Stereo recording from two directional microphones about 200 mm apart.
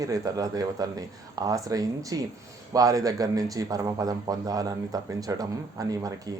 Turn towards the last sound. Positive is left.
turn(degrees=-20)  # may be behind; listen again after turning